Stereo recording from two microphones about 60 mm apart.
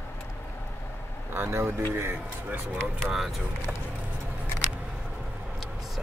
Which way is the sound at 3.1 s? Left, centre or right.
Centre.